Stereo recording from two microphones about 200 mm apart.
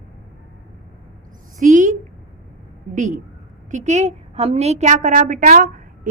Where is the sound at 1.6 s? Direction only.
40° right (ahead or behind).